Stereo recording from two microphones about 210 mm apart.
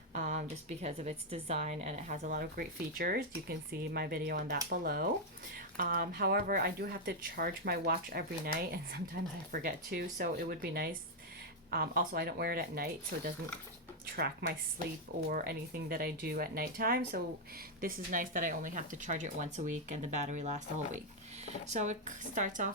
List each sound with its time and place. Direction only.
0.1 s a woman's voice: 35° right (ahead or behind)